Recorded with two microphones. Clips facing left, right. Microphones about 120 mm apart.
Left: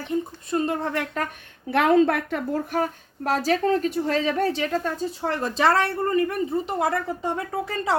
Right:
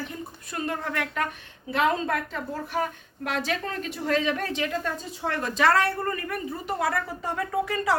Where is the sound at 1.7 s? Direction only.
65° left (ahead or behind).